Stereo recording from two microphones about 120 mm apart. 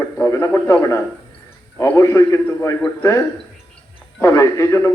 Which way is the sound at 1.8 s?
25° left (ahead or behind).